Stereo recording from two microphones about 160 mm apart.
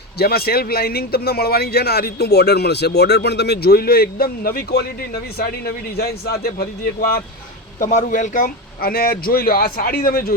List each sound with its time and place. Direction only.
0.2 s speech: 75° left (ahead or behind)
7.8 s speech: 55° left (ahead or behind)